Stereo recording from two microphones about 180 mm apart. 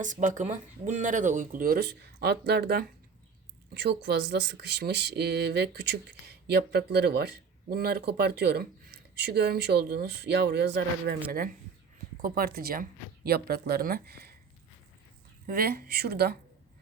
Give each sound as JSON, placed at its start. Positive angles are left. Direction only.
{"t": 0.0, "sound": "speech", "side_deg": -45}
{"t": 15.4, "sound": "speech", "side_deg": -60}